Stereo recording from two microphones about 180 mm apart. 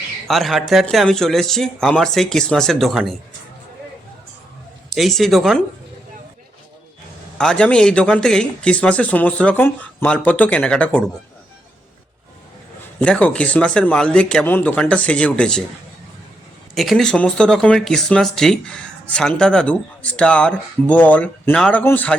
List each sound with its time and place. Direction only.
0.3 s speech: centre (ahead or behind)
4.9 s speech: centre (ahead or behind)
7.3 s speech: 5° left (ahead or behind)
13.0 s speech: 5° left (ahead or behind)
16.7 s speech: centre (ahead or behind)